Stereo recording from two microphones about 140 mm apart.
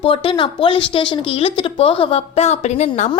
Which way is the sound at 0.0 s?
40° left (ahead or behind).